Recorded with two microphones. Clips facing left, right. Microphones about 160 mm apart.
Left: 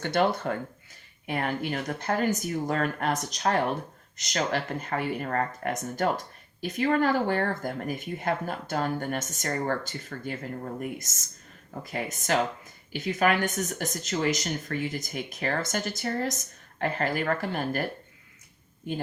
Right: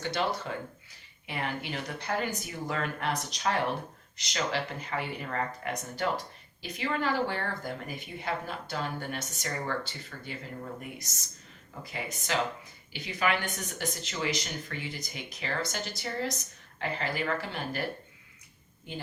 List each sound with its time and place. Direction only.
0.0 s speech: 55° left (ahead or behind)